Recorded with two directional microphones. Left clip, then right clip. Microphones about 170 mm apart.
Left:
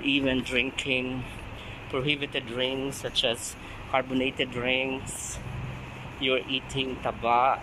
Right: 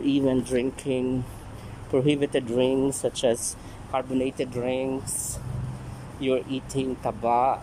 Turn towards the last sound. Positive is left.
turn(degrees=-25)  # may be behind; listen again after turning